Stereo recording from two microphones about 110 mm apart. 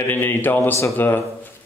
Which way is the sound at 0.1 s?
20° left (ahead or behind).